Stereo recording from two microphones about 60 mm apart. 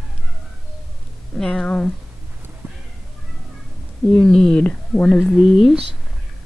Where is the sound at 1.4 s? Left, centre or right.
Centre.